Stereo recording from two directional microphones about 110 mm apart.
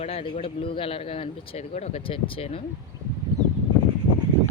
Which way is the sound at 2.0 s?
55° left (ahead or behind).